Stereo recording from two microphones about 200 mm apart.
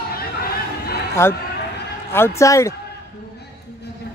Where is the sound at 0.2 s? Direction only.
50° left (ahead or behind).